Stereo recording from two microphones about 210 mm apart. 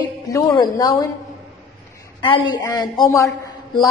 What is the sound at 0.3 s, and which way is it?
Speech, 15° left (ahead or behind).